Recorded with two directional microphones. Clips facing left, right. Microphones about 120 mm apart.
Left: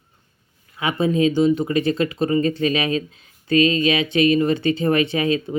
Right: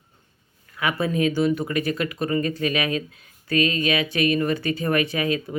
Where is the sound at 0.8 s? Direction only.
25° left (ahead or behind).